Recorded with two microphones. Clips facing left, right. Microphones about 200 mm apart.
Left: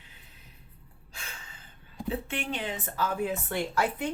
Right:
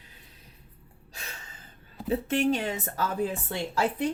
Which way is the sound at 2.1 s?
40° right (ahead or behind).